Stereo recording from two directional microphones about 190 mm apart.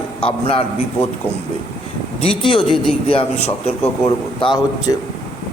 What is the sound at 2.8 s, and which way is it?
A man's voice, 30° left (ahead or behind).